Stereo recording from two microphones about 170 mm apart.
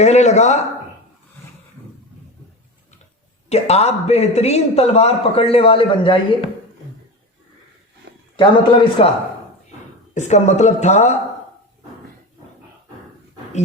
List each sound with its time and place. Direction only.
0.0 s speech: 40° left (ahead or behind)
3.5 s a man's voice: 40° left (ahead or behind)
8.4 s a man's voice: 30° left (ahead or behind)
10.2 s speech: 45° left (ahead or behind)